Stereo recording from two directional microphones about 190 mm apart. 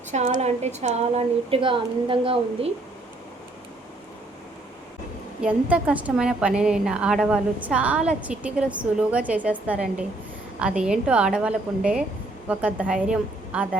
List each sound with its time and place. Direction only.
0.1 s speech: 40° right (ahead or behind)
5.4 s a woman's voice: 5° right (ahead or behind)